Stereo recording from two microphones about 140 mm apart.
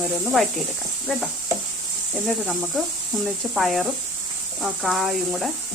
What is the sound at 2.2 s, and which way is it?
Speech, centre (ahead or behind).